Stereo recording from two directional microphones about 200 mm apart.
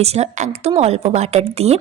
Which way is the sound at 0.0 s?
30° right (ahead or behind).